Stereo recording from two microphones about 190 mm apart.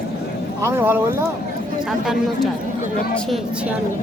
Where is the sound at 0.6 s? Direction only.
10° right (ahead or behind).